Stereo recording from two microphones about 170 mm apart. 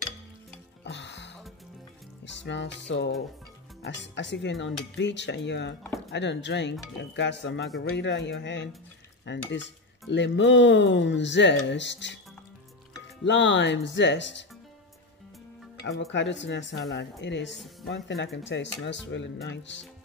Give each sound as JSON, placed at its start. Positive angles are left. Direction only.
{"t": 0.8, "sound": "music", "side_deg": 90}
{"t": 3.8, "sound": "cutlery", "side_deg": 90}
{"t": 13.2, "sound": "cutlery", "side_deg": 90}
{"t": 15.8, "sound": "cutlery", "side_deg": 90}